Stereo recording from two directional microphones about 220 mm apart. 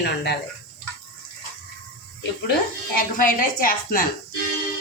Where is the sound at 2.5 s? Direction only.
40° left (ahead or behind).